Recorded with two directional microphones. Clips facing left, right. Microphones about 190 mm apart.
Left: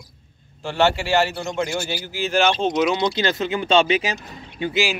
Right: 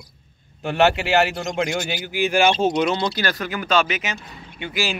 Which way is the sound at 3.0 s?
20° left (ahead or behind).